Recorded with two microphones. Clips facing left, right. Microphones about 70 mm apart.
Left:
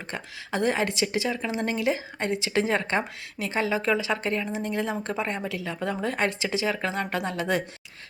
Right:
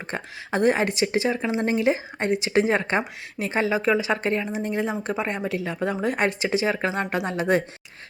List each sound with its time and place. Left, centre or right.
0.1 s a woman's voice: right